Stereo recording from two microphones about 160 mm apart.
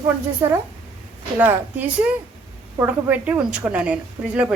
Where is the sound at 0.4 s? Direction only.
15° right (ahead or behind).